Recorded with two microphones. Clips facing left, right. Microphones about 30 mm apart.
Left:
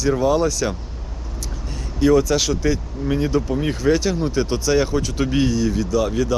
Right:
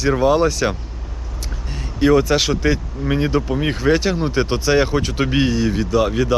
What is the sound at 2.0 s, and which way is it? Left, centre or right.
Speech, right.